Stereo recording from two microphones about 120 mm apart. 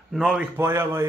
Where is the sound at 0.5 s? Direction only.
20° right (ahead or behind).